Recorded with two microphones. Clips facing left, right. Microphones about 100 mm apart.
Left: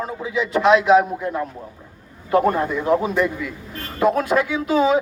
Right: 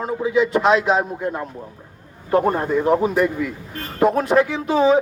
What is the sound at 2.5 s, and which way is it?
Speech, 35° right (ahead or behind).